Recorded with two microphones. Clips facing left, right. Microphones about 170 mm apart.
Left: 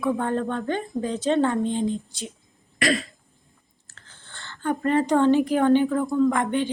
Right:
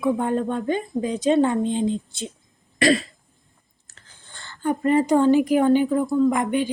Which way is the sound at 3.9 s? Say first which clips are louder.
Even; 15° right (ahead or behind).